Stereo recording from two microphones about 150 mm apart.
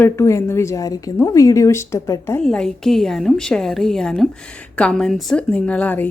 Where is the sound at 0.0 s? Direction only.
20° left (ahead or behind).